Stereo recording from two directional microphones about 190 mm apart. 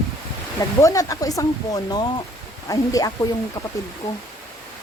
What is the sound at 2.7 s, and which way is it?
Speech, 20° left (ahead or behind).